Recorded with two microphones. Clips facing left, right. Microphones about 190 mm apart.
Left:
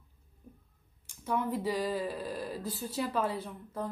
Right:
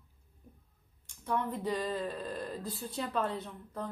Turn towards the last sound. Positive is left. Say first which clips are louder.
# left 2 dB
turn(degrees=5)  # may be behind; listen again after turning